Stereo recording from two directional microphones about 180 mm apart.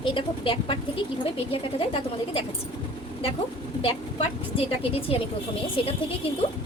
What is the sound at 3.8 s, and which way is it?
A woman's voice, 30° left (ahead or behind).